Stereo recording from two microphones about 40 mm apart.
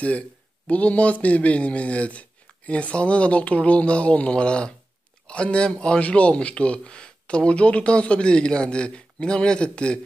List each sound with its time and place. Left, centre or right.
0.7 s a man's voice: left